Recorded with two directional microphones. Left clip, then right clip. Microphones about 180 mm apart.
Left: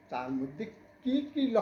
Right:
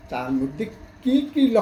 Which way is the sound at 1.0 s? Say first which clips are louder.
Right 11 dB; 10° right (ahead or behind).